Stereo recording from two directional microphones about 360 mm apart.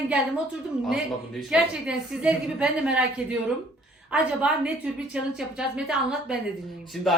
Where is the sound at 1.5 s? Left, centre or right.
Centre.